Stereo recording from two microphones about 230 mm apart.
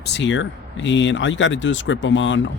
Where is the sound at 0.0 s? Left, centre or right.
Left.